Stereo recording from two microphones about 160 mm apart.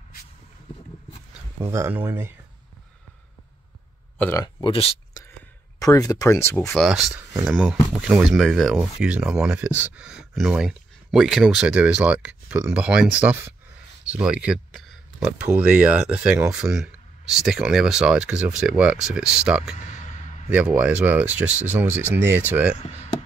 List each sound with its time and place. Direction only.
1.6 s speech: 15° right (ahead or behind)
4.2 s speech: 20° left (ahead or behind)
4.6 s speech: 35° left (ahead or behind)
5.2 s whispering: 25° left (ahead or behind)
5.8 s speech: 20° left (ahead or behind)
6.7 s speech: centre (ahead or behind)
19.9 s a sound: 45° left (ahead or behind)
20.4 s speech: 10° right (ahead or behind)